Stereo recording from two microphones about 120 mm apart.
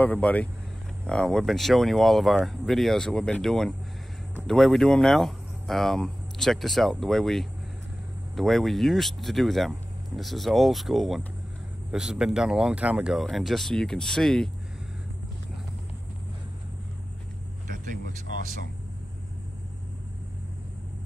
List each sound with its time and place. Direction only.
0.0 s speech: 10° left (ahead or behind)